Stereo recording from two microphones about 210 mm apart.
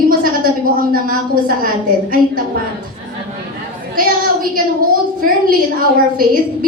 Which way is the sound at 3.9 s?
45° right (ahead or behind).